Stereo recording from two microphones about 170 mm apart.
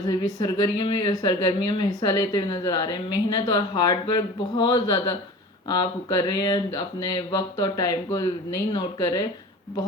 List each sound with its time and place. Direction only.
0.1 s speech: 20° left (ahead or behind)